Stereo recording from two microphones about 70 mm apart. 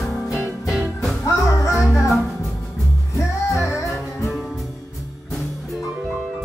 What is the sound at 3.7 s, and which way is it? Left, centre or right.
Music, left.